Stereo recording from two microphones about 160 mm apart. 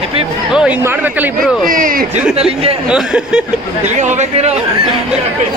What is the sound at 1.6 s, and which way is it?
Speech, 60° right (ahead or behind).